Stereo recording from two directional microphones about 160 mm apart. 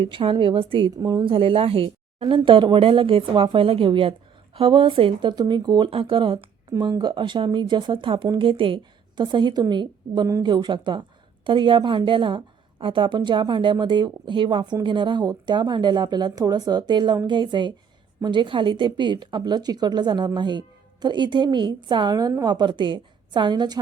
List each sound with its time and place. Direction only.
0.0 s a woman's voice: 30° right (ahead or behind)